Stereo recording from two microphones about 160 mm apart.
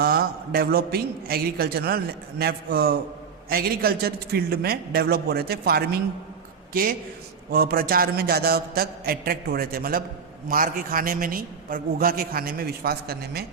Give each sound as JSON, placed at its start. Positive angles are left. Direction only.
{"t": 0.0, "sound": "a man's voice", "side_deg": -75}
{"t": 7.5, "sound": "a man's voice", "side_deg": -75}